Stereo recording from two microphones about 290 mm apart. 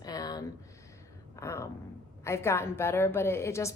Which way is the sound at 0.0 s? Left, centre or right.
Centre.